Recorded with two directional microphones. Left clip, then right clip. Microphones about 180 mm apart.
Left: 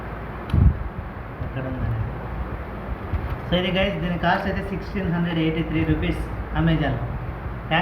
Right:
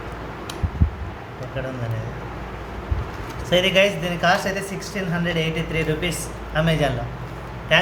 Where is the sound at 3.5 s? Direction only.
90° right.